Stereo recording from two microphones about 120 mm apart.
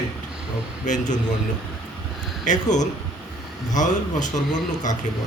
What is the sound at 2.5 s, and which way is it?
Speech, 90° left.